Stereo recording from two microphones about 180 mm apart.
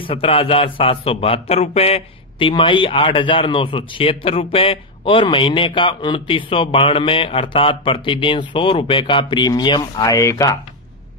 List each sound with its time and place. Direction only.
0.0 s a man's voice: 30° left (ahead or behind)